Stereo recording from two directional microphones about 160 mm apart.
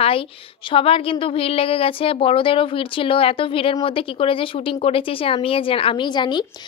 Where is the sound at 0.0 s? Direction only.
35° left (ahead or behind).